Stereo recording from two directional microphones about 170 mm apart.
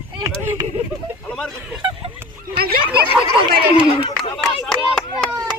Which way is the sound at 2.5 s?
65° right (ahead or behind).